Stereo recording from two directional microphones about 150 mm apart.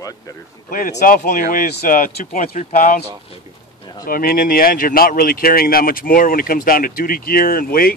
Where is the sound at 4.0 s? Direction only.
70° left (ahead or behind).